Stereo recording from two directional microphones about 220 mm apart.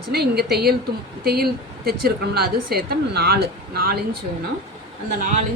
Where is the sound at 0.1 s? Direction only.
45° right (ahead or behind).